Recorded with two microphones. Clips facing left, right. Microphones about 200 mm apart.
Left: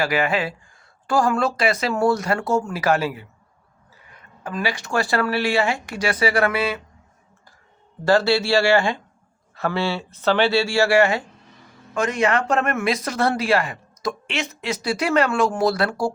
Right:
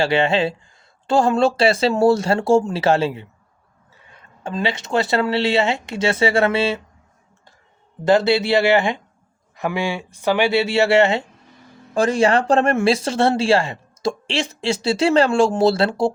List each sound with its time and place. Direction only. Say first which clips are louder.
0.0 s speech: right 4 dB; 25° right (ahead or behind)
8.0 s speech: right 2 dB; 20° right (ahead or behind)